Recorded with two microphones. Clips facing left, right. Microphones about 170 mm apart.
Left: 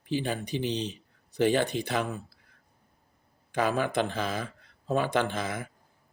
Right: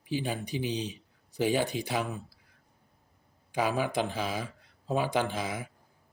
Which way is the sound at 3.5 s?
10° right (ahead or behind).